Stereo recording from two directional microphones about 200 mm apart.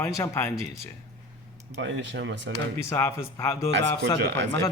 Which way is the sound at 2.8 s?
15° left (ahead or behind).